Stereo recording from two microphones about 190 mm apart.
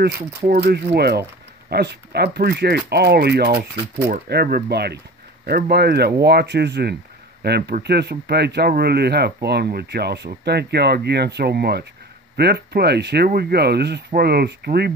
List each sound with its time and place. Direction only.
0.0 s speech: 55° right (ahead or behind)